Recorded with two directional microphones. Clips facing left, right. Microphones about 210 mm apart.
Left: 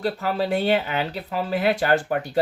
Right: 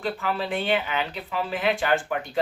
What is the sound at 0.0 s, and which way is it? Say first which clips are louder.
Speech: left 4 dB; 40° left (ahead or behind).